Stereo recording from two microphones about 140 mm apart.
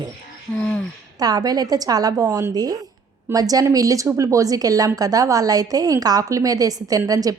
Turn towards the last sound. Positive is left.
turn(degrees=-25)  # may be behind; listen again after turning